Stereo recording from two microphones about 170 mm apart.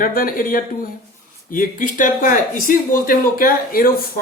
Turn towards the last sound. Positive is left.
turn(degrees=55)  # may be behind; listen again after turning